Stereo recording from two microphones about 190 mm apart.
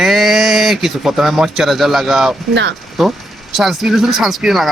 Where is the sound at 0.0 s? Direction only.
Centre (ahead or behind).